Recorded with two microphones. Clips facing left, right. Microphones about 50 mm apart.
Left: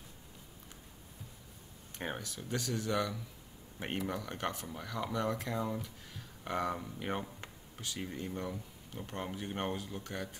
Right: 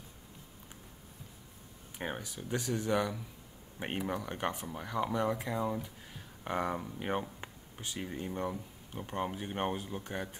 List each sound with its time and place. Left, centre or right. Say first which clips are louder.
2.0 s speech: right 1 dB; centre